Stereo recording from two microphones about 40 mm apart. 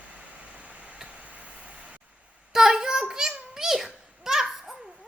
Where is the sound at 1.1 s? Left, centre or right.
Right.